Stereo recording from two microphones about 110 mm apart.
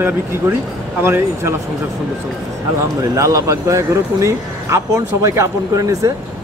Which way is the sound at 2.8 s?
30° right (ahead or behind).